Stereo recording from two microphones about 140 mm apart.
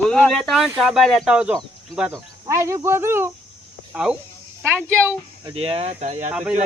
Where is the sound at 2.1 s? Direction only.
20° right (ahead or behind).